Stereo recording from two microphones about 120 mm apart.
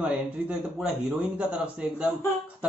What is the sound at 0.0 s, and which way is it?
A man's voice, 10° right (ahead or behind).